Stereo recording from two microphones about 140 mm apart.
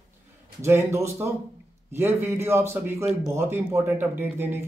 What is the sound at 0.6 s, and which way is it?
Speech, 20° right (ahead or behind).